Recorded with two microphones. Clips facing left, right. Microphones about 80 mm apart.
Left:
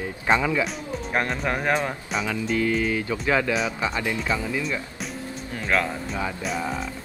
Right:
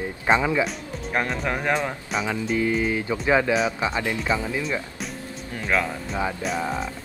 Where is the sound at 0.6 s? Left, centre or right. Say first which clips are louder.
Right 1 dB; centre.